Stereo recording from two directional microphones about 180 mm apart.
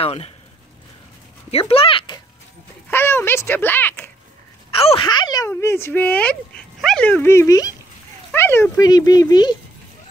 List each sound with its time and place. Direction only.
0.0 s speech: 35° left (ahead or behind)
1.5 s speech: 30° left (ahead or behind)
2.9 s speech: 10° left (ahead or behind)
4.6 s speech: 30° left (ahead or behind)